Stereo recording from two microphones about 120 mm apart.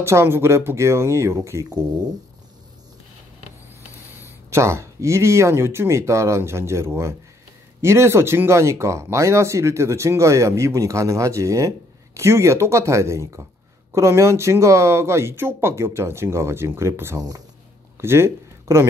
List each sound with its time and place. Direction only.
0.0 s speech: 25° right (ahead or behind)
4.2 s speech: 20° right (ahead or behind)